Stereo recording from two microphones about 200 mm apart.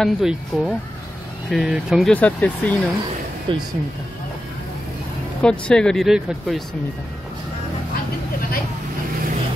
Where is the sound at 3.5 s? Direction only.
25° right (ahead or behind).